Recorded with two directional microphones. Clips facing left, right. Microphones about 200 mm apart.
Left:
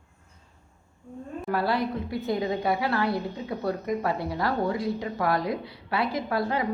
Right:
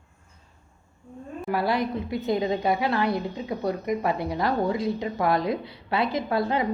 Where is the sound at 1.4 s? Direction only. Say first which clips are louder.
Right 1 dB; 15° right (ahead or behind).